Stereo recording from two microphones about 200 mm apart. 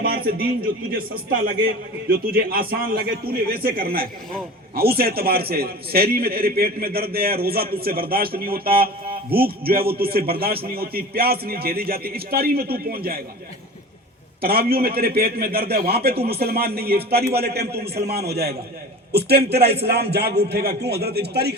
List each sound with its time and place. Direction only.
0.0 s a sound: 50° right (ahead or behind)
0.9 s a man's voice: 45° right (ahead or behind)
14.4 s a man's voice: 50° right (ahead or behind)